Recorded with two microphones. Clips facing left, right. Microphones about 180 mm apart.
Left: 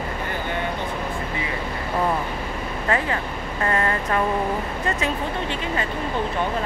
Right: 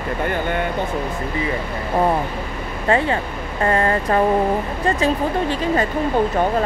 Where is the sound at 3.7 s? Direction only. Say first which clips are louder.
Right 5 dB; 30° right (ahead or behind).